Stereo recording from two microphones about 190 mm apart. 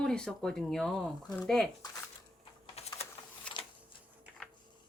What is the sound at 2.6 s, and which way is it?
Typing, 35° left (ahead or behind).